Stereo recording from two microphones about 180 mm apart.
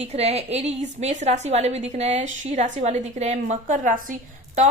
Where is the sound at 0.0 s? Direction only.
35° right (ahead or behind).